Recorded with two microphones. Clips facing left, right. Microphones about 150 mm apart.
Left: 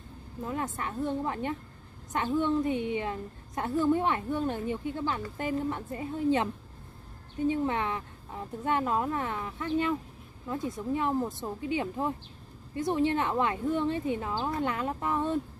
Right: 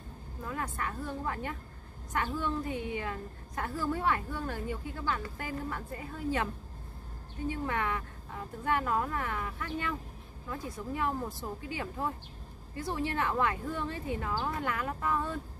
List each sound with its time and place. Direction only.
0.4 s a woman's voice: 25° left (ahead or behind)